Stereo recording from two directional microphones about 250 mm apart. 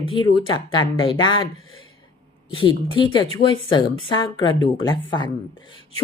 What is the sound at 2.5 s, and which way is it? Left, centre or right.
A woman's voice, left.